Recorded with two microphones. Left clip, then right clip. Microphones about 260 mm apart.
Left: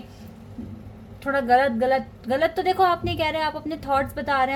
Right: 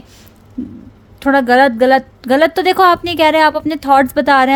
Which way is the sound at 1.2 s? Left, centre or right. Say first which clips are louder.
Right 9 dB; right.